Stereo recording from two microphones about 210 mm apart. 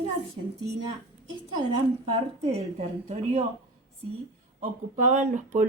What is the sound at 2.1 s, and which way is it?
Speech, 30° right (ahead or behind).